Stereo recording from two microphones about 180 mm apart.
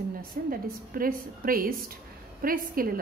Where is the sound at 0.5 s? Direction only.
50° right (ahead or behind).